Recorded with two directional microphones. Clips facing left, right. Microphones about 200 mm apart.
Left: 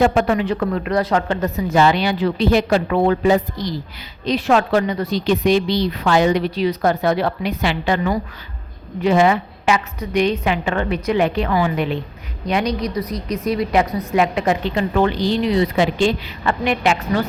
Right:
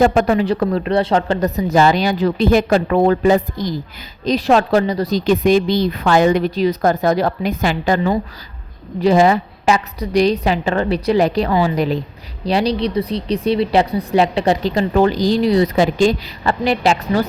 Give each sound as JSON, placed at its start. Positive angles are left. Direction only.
{"t": 0.0, "sound": "a woman's voice", "side_deg": -40}
{"t": 4.3, "sound": "a woman's voice", "side_deg": -35}